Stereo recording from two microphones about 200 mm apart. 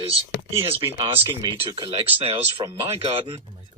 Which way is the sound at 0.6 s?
25° right (ahead or behind).